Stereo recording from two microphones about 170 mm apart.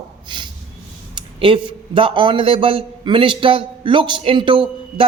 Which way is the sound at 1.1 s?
30° right (ahead or behind).